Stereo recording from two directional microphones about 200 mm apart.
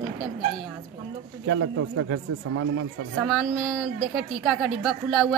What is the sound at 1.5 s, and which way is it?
A man's voice, 90° right.